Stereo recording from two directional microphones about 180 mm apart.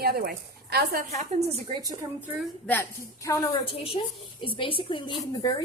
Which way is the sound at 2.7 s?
15° left (ahead or behind).